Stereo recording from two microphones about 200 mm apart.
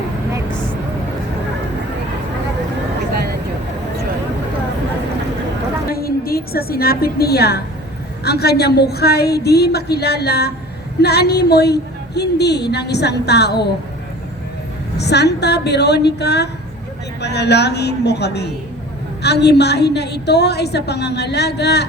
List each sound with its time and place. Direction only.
0.5 s vehicle: 5° left (ahead or behind)
5.9 s a woman's voice: 50° left (ahead or behind)
14.9 s a woman's voice: 55° left (ahead or behind)